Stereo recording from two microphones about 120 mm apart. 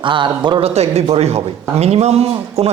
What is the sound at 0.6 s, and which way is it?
Speech, 65° right (ahead or behind).